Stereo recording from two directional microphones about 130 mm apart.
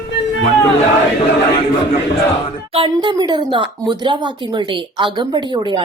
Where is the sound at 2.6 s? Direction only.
45° right (ahead or behind).